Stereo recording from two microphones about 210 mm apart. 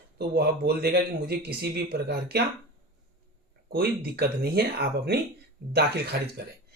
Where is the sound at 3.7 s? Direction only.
50° right (ahead or behind).